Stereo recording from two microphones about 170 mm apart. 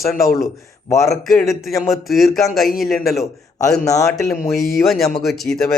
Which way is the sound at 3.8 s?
20° left (ahead or behind).